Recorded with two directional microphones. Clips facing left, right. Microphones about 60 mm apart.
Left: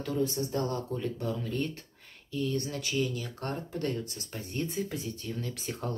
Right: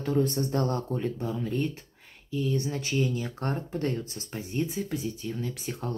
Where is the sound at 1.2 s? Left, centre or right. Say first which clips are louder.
Right 3 dB; centre.